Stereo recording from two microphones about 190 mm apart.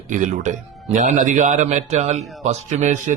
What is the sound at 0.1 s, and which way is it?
Speech, 40° right (ahead or behind).